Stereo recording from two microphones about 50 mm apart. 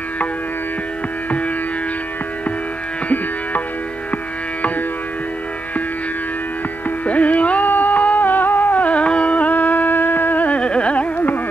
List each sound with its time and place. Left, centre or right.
7.1 s music: left